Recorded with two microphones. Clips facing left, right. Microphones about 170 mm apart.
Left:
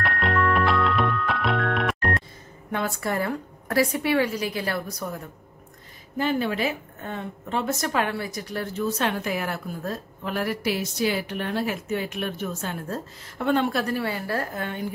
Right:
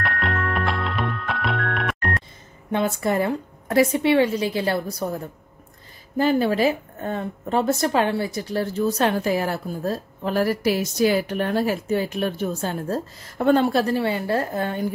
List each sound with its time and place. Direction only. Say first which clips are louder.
0.0 s music: left 2 dB; centre (ahead or behind)
2.7 s a woman's voice: right 5 dB; 20° right (ahead or behind)
6.1 s a woman's voice: right 5 dB; 35° right (ahead or behind)